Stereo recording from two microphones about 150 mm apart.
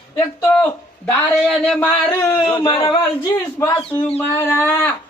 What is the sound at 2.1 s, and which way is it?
Speech, 20° left (ahead or behind).